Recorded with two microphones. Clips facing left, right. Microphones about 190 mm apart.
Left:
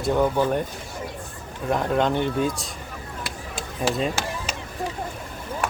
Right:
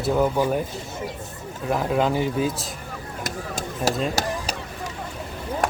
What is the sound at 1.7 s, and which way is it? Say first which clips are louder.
Speech: even; 5° right (ahead or behind).